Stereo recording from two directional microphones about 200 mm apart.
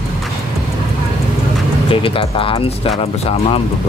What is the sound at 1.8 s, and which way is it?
Speech, 25° left (ahead or behind).